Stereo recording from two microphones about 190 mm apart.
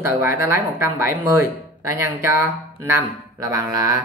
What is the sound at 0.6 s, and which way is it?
A woman's voice, 15° right (ahead or behind).